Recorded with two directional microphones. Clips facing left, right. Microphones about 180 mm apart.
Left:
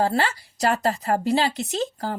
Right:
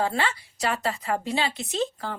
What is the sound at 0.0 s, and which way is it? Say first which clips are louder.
A woman's voice: left 4 dB; 40° left (ahead or behind).